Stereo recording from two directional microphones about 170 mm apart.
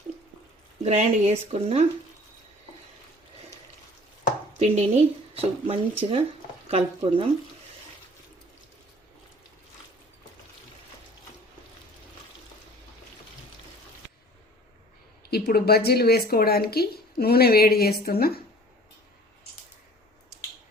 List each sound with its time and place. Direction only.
0.9 s speech: 40° right (ahead or behind)
4.6 s speech: 40° right (ahead or behind)
15.2 s speech: 65° left (ahead or behind)